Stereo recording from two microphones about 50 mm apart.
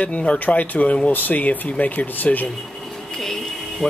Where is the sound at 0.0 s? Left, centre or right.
Left.